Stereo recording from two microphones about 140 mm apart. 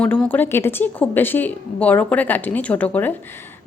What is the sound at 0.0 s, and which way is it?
A woman's voice, 10° left (ahead or behind).